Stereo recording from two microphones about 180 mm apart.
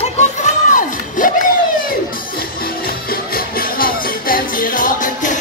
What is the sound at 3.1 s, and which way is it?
Music, 55° left (ahead or behind).